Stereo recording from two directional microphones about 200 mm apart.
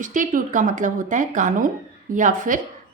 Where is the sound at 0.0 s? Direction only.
40° right (ahead or behind).